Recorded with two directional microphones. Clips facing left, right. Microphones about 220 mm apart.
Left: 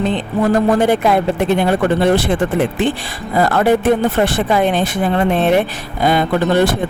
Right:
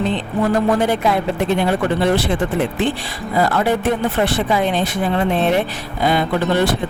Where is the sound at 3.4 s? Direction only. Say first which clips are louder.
Left 5 dB; 50° left (ahead or behind).